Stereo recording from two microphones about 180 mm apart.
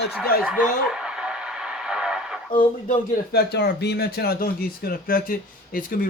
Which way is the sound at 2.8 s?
55° left (ahead or behind).